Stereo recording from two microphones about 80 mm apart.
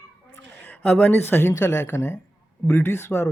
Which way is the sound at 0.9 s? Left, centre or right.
Centre.